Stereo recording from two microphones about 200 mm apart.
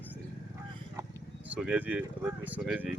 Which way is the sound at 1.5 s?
5° right (ahead or behind).